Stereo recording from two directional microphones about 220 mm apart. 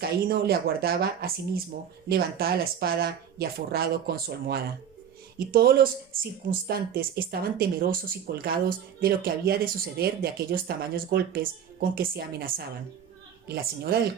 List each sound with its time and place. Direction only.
0.0 s speech: 45° right (ahead or behind)